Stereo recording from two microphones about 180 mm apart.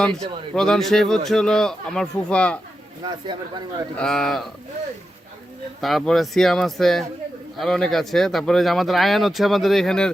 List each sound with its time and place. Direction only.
0.5 s speech: 5° left (ahead or behind)
3.0 s speech: 25° right (ahead or behind)
3.9 s speech: 5° left (ahead or behind)
5.8 s speech: centre (ahead or behind)